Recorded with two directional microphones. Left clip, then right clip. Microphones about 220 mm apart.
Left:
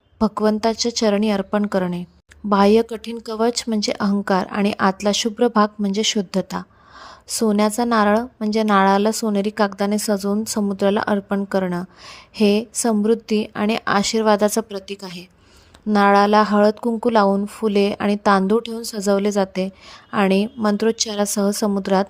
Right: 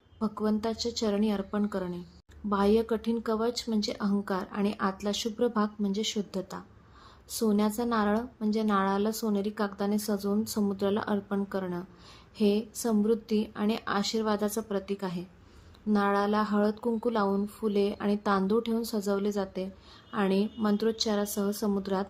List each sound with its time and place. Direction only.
0.2 s speech: 40° left (ahead or behind)